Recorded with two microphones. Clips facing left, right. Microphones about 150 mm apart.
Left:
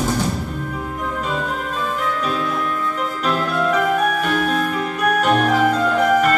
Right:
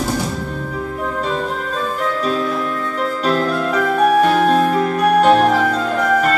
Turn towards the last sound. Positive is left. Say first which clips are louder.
# right 5 dB
turn(degrees=-35)  # may be behind; listen again after turning